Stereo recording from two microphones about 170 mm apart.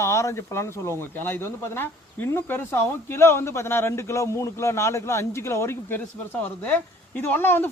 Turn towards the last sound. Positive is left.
turn(degrees=10)  # may be behind; listen again after turning